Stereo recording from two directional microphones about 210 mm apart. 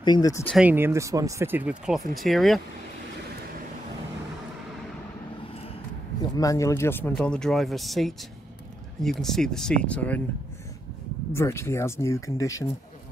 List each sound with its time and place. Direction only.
0.0 s speech: 20° left (ahead or behind)
0.5 s speech: 5° right (ahead or behind)
6.3 s speech: 15° left (ahead or behind)
11.3 s speech: 15° left (ahead or behind)